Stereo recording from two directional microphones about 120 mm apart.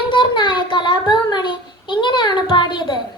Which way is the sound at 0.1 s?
45° left (ahead or behind).